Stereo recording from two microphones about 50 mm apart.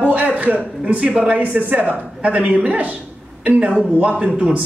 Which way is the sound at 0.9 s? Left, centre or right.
Right.